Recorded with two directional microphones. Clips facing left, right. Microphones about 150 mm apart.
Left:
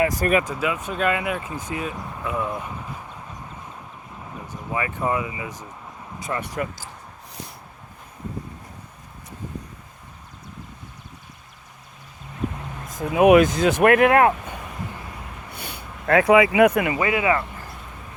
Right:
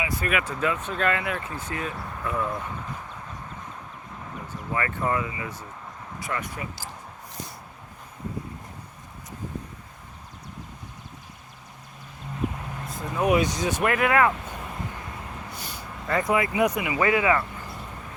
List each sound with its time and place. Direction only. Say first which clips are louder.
0.0 s speech: left 7 dB; 40° left (ahead or behind)
0.4 s speech: left 1 dB; 10° left (ahead or behind)
4.7 s speech: left 2 dB; 15° left (ahead or behind)
13.1 s speech: left 9 dB; 75° left (ahead or behind)
13.7 s speech: left 8 dB; 60° left (ahead or behind)
15.4 s a sound: left 1 dB; 60° left (ahead or behind)
17.0 s speech: right 3 dB; 20° left (ahead or behind)